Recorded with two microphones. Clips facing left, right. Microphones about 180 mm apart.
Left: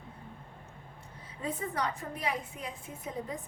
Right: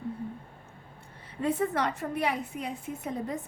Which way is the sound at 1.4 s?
70° right (ahead or behind).